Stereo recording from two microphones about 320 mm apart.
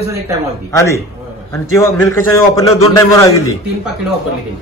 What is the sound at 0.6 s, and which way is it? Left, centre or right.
A man's voice, centre.